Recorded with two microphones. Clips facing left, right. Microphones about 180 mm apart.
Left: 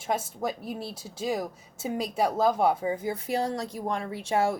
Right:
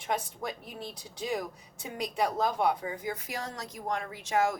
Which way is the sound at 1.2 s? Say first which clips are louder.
Left 4 dB; 40° left (ahead or behind).